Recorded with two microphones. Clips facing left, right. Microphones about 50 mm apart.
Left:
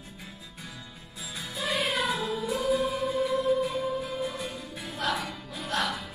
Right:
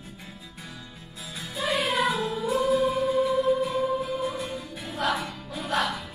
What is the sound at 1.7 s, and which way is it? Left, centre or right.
Music, right.